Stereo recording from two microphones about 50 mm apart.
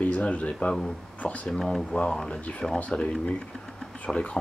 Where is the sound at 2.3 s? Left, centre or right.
Left.